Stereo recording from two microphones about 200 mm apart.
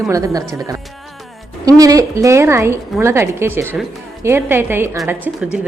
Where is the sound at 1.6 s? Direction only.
15° right (ahead or behind).